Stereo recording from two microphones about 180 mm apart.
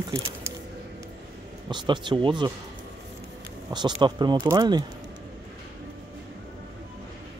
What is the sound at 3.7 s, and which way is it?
A man's voice, 25° right (ahead or behind).